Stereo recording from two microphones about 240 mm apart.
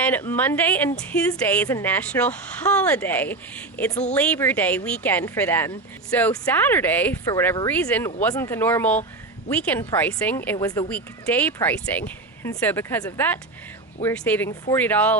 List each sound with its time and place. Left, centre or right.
0.0 s a woman's voice: centre